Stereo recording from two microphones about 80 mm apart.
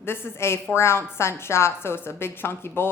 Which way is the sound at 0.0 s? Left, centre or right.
Left.